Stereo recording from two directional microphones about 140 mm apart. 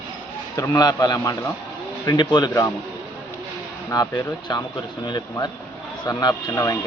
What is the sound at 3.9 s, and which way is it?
A man's voice, 25° left (ahead or behind).